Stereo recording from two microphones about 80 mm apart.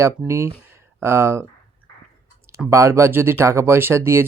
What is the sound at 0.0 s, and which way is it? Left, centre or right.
Speech, right.